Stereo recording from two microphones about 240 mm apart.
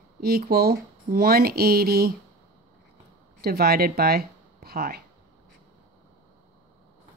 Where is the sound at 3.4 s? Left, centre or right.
Right.